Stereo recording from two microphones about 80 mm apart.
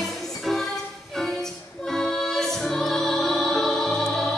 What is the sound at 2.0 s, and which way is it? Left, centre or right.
Music, centre.